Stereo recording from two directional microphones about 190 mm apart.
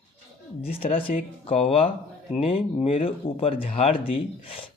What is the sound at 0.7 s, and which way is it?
Speech, 30° left (ahead or behind).